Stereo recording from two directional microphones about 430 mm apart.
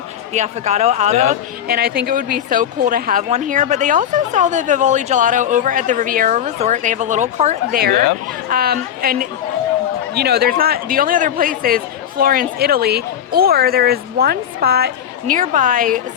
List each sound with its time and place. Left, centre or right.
0.3 s speech: centre